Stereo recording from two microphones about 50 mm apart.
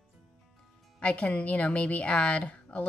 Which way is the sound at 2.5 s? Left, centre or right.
Left.